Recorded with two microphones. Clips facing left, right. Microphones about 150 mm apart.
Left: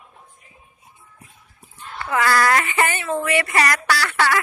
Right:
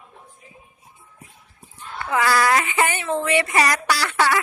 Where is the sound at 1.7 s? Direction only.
15° right (ahead or behind).